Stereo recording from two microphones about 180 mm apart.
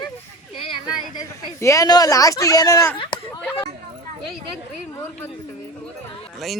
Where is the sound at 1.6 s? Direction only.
15° left (ahead or behind).